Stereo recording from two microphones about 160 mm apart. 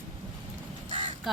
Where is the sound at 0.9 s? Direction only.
35° right (ahead or behind).